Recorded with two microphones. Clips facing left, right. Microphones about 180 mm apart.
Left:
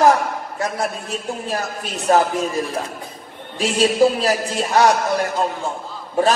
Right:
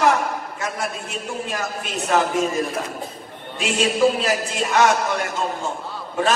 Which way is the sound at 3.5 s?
35° left (ahead or behind).